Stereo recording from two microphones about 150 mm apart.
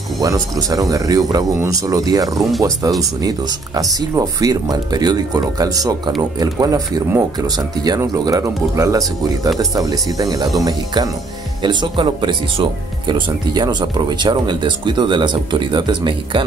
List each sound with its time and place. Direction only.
0.2 s speech: 25° right (ahead or behind)
11.6 s speech: 30° right (ahead or behind)